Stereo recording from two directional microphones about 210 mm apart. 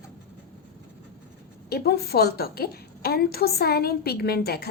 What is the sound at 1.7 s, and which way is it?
A woman's voice, 50° left (ahead or behind).